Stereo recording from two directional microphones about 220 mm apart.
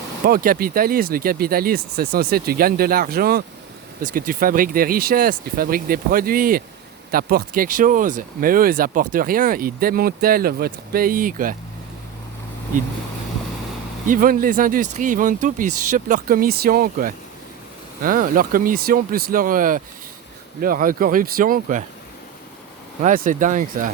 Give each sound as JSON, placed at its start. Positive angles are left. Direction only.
{"t": 0.3, "sound": "speech", "side_deg": -40}
{"t": 14.1, "sound": "speech", "side_deg": -40}
{"t": 23.0, "sound": "speech", "side_deg": -35}